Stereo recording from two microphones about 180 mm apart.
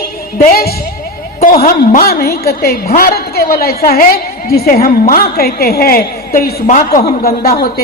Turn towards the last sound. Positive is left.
turn(degrees=60)  # may be behind; listen again after turning